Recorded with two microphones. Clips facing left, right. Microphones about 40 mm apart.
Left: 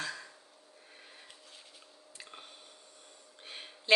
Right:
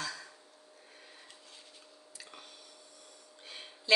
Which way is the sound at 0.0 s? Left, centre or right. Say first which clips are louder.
Left 1 dB; left.